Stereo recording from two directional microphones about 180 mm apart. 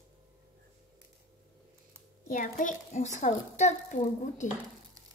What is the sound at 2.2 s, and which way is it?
A woman's voice, 45° left (ahead or behind).